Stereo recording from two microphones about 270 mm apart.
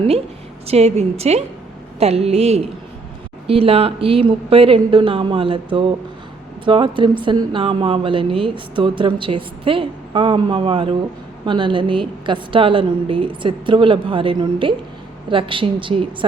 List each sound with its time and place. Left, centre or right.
0.7 s a woman's voice: right
6.7 s a woman's voice: centre